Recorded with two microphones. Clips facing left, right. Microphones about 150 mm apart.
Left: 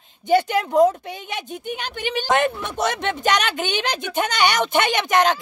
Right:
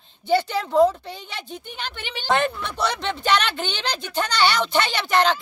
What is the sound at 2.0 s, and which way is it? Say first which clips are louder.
Speech: left 2 dB; 45° left (ahead or behind).